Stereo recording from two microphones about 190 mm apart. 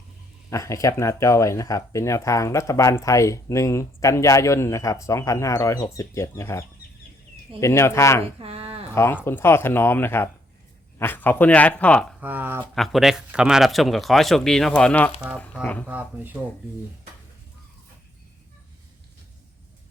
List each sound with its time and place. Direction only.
0.5 s speech: 15° left (ahead or behind)
8.4 s a sound: 30° right (ahead or behind)
9.0 s speech: 10° left (ahead or behind)
12.2 s speech: 10° right (ahead or behind)
12.7 s speech: centre (ahead or behind)
15.9 s speech: 10° right (ahead or behind)